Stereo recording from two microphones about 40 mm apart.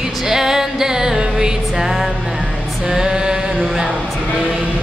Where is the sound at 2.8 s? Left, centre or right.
Centre.